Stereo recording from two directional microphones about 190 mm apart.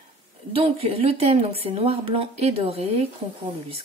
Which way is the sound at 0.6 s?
30° right (ahead or behind).